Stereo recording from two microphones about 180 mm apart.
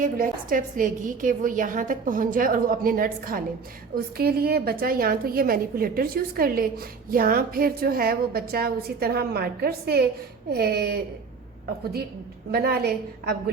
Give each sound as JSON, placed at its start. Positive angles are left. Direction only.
{"t": 0.0, "sound": "a woman's voice", "side_deg": -50}
{"t": 12.5, "sound": "a woman's voice", "side_deg": -60}